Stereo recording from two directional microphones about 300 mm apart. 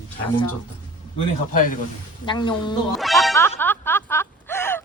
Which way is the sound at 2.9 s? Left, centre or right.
Centre.